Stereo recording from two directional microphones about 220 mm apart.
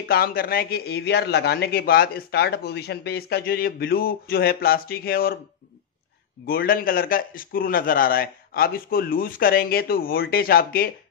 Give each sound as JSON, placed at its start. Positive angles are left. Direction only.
{"t": 0.1, "sound": "a man's voice", "side_deg": 40}
{"t": 6.4, "sound": "a man's voice", "side_deg": 40}